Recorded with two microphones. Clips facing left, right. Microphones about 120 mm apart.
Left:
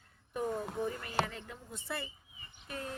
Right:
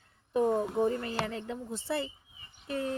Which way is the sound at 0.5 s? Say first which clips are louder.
Right 8 dB; 35° right (ahead or behind).